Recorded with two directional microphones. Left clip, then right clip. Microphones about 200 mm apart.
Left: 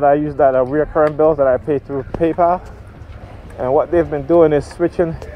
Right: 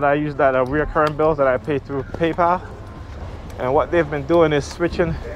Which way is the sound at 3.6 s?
45° left (ahead or behind).